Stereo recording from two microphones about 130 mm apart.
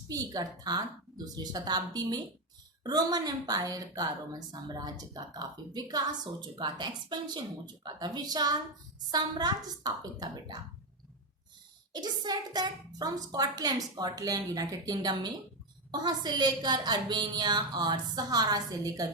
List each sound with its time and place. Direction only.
0.1 s a woman's voice: 30° right (ahead or behind)
11.9 s a woman's voice: 30° right (ahead or behind)